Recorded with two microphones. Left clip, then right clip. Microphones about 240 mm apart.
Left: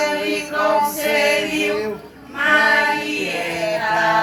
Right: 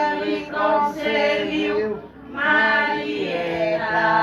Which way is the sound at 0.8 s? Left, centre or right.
Left.